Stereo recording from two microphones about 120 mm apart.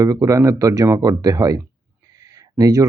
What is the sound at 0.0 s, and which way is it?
Speech, 30° right (ahead or behind).